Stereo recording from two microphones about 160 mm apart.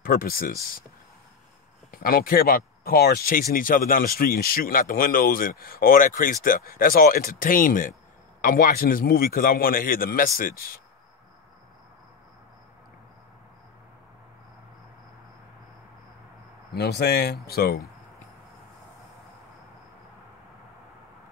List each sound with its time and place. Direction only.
0.0 s speech: 65° left (ahead or behind)
1.9 s speech: 65° left (ahead or behind)
16.7 s speech: 75° left (ahead or behind)